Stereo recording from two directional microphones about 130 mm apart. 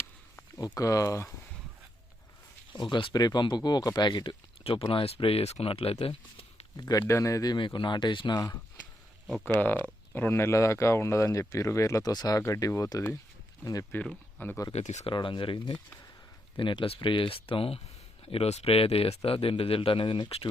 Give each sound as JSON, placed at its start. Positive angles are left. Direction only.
{"t": 0.8, "sound": "speech", "side_deg": 25}
{"t": 2.7, "sound": "speech", "side_deg": 40}
{"t": 6.7, "sound": "speech", "side_deg": 30}
{"t": 9.6, "sound": "speech", "side_deg": 15}
{"t": 13.9, "sound": "speech", "side_deg": 10}
{"t": 14.7, "sound": "speech", "side_deg": 60}
{"t": 15.0, "sound": "speech", "side_deg": 40}